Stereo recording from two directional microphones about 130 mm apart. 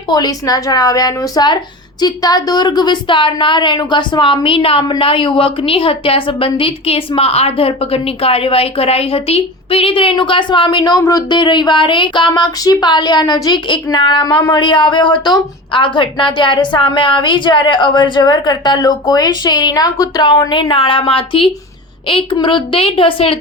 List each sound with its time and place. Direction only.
0.1 s a woman's voice: 30° left (ahead or behind)